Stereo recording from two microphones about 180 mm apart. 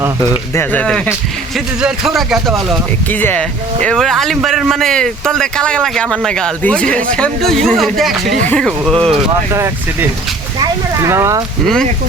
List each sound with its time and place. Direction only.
0.2 s speech: 15° left (ahead or behind)
3.1 s speech: 10° left (ahead or behind)
9.5 s speech: 15° right (ahead or behind)